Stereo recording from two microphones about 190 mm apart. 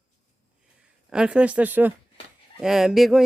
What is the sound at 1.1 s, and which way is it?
Speech, 5° right (ahead or behind).